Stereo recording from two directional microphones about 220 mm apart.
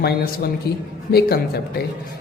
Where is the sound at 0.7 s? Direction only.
45° left (ahead or behind).